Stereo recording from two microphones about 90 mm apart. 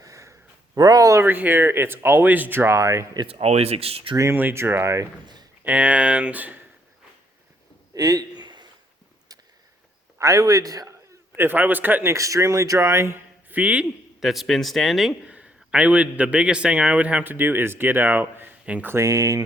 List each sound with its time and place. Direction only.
0.0 s a sound: 35° right (ahead or behind)
1.3 s speech: 20° right (ahead or behind)
3.8 s speech: 90° right
4.4 s speech: 25° right (ahead or behind)
5.6 s a man's voice: 15° right (ahead or behind)
7.9 s a sound: 45° right (ahead or behind)
10.2 s speech: 35° right (ahead or behind)
11.3 s speech: 20° right (ahead or behind)
12.1 s speech: 35° right (ahead or behind)
13.5 s a man's voice: 15° right (ahead or behind)
14.2 s a man's voice: centre (ahead or behind)
15.2 s a man's voice: 15° right (ahead or behind)
18.9 s speech: 40° right (ahead or behind)